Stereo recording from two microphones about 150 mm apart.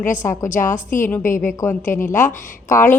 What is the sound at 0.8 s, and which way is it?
Speech, 60° left (ahead or behind).